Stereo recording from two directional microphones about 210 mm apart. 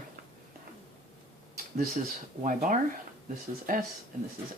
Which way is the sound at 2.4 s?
40° right (ahead or behind).